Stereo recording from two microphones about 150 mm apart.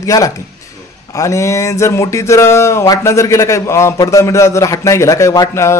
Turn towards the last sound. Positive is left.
turn(degrees=20)  # may be behind; listen again after turning